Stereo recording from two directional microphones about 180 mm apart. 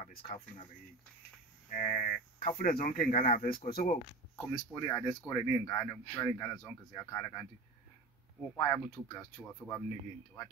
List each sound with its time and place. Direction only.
1.7 s a sound: 50° left (ahead or behind)
2.6 s speech: 50° left (ahead or behind)
4.4 s speech: 15° left (ahead or behind)
8.5 s speech: 15° left (ahead or behind)